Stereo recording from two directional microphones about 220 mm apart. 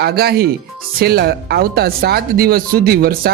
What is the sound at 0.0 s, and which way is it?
Speech, 45° right (ahead or behind).